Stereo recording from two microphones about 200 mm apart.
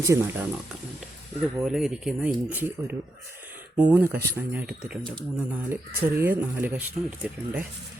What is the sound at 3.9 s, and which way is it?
Speech, 10° right (ahead or behind).